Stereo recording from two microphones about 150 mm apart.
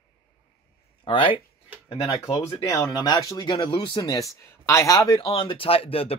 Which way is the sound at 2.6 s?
20° left (ahead or behind).